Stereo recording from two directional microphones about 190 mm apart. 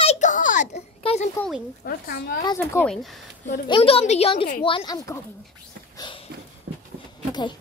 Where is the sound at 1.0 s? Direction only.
30° left (ahead or behind).